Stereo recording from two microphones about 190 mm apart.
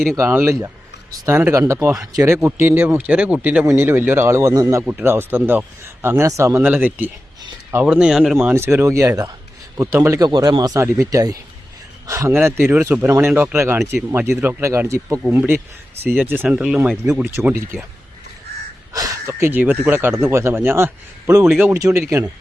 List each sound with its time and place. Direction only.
0.1 s speech: 10° right (ahead or behind)
8.5 s speech: 15° right (ahead or behind)
18.9 s speech: 15° right (ahead or behind)